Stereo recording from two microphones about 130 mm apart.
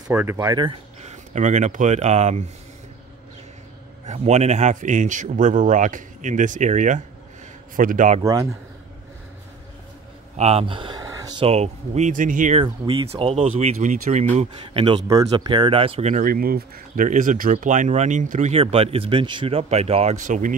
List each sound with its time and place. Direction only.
0.1 s speech: 15° right (ahead or behind)
1.0 s speech: 65° right (ahead or behind)
4.0 s speech: 60° right (ahead or behind)
7.7 s a man's voice: 90° right
8.2 s a man's voice: 25° right (ahead or behind)
10.3 s speech: 55° right (ahead or behind); by 11.1 s 35° right (ahead or behind)
11.1 s a sound: 25° right (ahead or behind)
11.3 s speech: 50° right (ahead or behind); by 12.5 s 85° right
12.6 s speech: 45° right (ahead or behind); by 14.2 s 60° right (ahead or behind)
14.3 s speech: 50° right (ahead or behind)
15.0 s speech: 30° right (ahead or behind); by 16.4 s 75° right (ahead or behind)
16.9 s speech: 90° right; by 18.5 s 75° right (ahead or behind)
18.5 s speech: 50° right (ahead or behind); by 20.5 s 75° right (ahead or behind)